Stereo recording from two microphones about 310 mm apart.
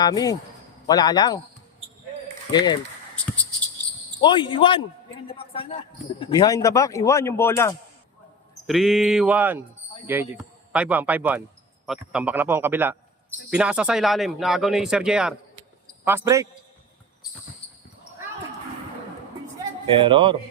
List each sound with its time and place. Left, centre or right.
0.0 s speech: centre
2.5 s speech: centre
4.2 s a man's voice: centre
20.0 s a man's voice: centre